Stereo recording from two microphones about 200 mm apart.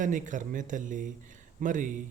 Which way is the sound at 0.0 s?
40° right (ahead or behind).